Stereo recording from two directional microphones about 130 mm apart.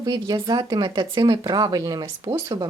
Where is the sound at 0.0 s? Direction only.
30° right (ahead or behind).